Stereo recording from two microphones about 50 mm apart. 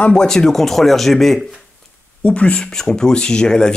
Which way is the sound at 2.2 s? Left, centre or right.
Left.